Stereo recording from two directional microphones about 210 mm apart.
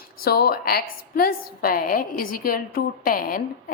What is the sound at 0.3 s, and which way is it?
A woman's voice, 45° left (ahead or behind).